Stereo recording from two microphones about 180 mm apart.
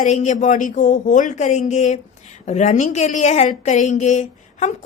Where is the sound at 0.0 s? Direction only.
40° left (ahead or behind).